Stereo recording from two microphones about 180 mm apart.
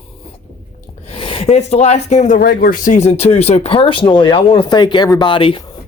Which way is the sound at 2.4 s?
50° left (ahead or behind).